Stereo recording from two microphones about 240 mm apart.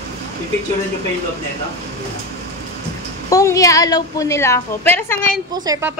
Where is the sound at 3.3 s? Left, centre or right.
Centre.